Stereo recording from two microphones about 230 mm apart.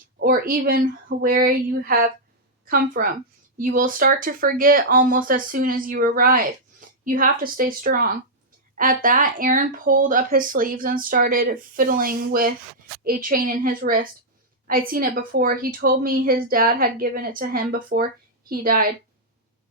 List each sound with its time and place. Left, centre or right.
0.2 s speech: right